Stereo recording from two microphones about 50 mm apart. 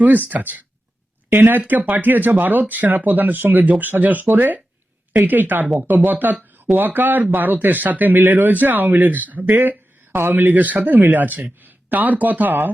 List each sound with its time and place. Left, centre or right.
0.0 s speech: right
1.3 s speech: right